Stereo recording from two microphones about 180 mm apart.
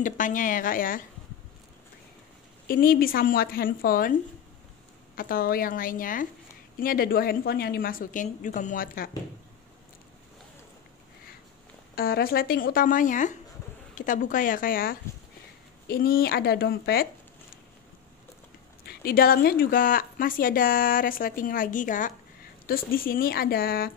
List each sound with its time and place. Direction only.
0.0 s speech: 45° left (ahead or behind)
2.7 s a woman's voice: 55° left (ahead or behind)
5.1 s speech: 55° left (ahead or behind)
11.9 s a woman's voice: 55° left (ahead or behind)
18.9 s a woman's voice: 55° left (ahead or behind)